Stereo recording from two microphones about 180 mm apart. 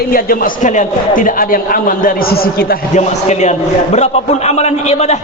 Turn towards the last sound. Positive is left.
turn(degrees=35)  # may be behind; listen again after turning